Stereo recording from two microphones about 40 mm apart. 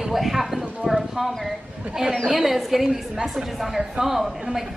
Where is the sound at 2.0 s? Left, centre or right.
Centre.